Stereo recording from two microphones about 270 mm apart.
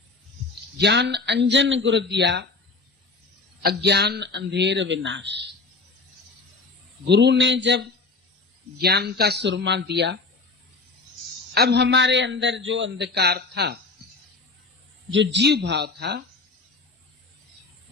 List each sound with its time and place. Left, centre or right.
0.8 s a man's voice: right
3.6 s a man's voice: right
7.1 s a man's voice: right
11.5 s a man's voice: right
15.1 s a man's voice: right